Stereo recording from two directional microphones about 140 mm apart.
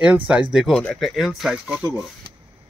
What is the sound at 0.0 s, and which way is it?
Speech, 10° right (ahead or behind).